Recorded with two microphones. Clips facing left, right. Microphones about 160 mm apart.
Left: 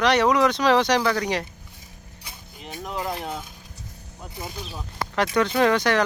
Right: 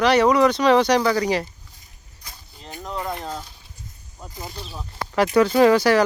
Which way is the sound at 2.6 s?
15° left (ahead or behind).